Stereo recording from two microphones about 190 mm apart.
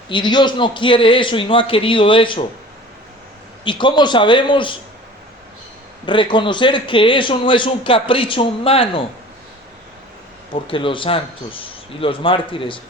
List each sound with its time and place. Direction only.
0.1 s a man's voice: 25° left (ahead or behind)
3.6 s a man's voice: 25° left (ahead or behind)
6.1 s a man's voice: 25° left (ahead or behind)
10.5 s a man's voice: 25° left (ahead or behind)